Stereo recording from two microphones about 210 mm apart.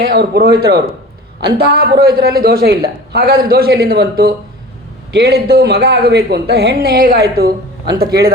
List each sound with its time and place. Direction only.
0.1 s a man's voice: 45° right (ahead or behind)